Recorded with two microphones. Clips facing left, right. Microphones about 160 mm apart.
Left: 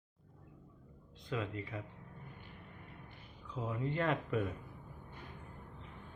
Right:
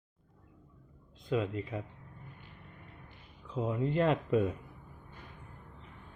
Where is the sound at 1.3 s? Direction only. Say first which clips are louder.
Right 7 dB; 20° right (ahead or behind).